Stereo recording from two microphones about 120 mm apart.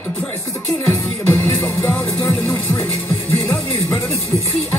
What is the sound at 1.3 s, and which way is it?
Music, 15° left (ahead or behind).